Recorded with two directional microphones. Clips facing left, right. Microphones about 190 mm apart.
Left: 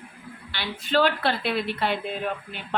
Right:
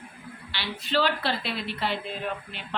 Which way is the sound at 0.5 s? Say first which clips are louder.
Left 3 dB; 50° left (ahead or behind).